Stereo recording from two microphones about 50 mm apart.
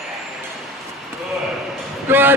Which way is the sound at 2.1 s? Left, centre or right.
Right.